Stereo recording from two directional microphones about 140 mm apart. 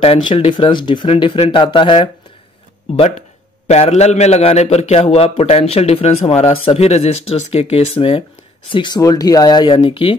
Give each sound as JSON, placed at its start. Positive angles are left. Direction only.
{"t": 0.0, "sound": "speech", "side_deg": 45}
{"t": 2.9, "sound": "a man's voice", "side_deg": 50}
{"t": 8.7, "sound": "speech", "side_deg": 30}